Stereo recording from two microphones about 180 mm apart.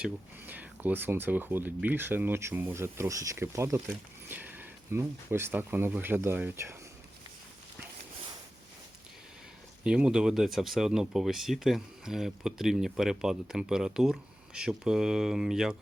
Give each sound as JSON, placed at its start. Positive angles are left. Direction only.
{"t": 0.0, "sound": "speech", "side_deg": -10}
{"t": 9.8, "sound": "speech", "side_deg": -5}